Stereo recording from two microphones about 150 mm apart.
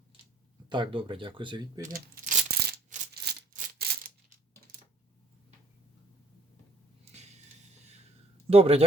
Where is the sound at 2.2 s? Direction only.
60° right (ahead or behind).